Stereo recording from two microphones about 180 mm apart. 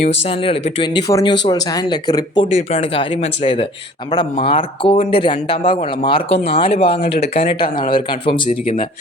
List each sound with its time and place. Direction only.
0.0 s a man's voice: 35° left (ahead or behind)
2.5 s a man's voice: 40° left (ahead or behind)